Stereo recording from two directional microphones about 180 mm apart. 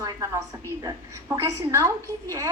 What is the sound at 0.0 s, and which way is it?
A woman's voice, 20° right (ahead or behind).